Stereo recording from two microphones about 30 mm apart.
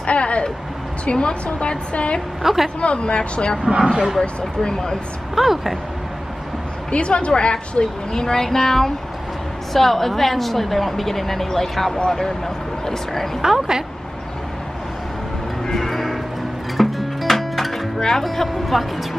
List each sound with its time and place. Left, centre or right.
0.0 s vehicle: left
1.1 s a woman's voice: left
2.4 s a woman's voice: centre
2.8 s a woman's voice: left
3.6 s speech: right
4.2 s speech: left
5.3 s a woman's voice: centre
6.9 s a woman's voice: left
7.5 s a woman's voice: left
13.4 s a woman's voice: centre
15.6 s music: centre
15.9 s music: centre
18.2 s speech: centre